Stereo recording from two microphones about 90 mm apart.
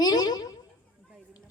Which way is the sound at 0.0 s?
50° left (ahead or behind).